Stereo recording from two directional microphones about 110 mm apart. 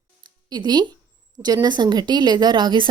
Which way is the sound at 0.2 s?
40° right (ahead or behind).